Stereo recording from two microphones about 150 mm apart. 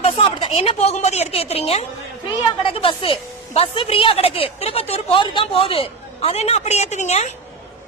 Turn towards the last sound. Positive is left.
turn(degrees=50)  # may be behind; listen again after turning